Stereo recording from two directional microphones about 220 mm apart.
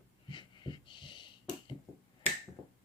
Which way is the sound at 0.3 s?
20° left (ahead or behind).